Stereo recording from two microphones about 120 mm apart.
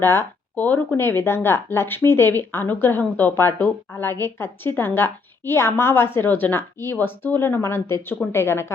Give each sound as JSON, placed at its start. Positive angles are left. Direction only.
{"t": 0.0, "sound": "speech", "side_deg": 20}